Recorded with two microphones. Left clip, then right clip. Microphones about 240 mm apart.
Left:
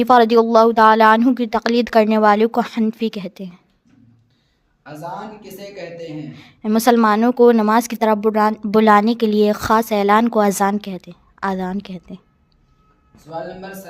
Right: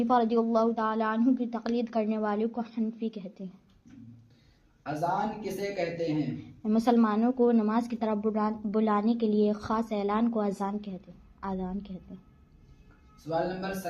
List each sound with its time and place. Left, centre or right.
0.0 s speech: left
5.4 s speech: left
6.6 s speech: left